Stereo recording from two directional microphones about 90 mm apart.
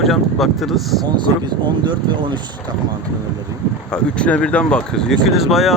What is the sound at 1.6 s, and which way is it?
Speech, 60° right (ahead or behind).